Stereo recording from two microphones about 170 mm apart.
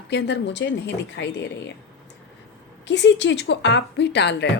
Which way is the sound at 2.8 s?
90° left.